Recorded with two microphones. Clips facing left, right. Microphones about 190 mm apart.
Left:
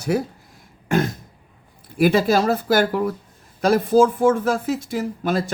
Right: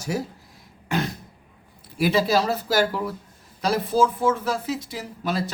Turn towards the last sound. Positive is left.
turn(degrees=50)  # may be behind; listen again after turning